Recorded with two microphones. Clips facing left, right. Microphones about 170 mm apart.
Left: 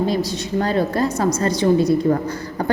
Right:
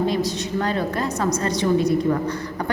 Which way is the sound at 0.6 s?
35° left (ahead or behind).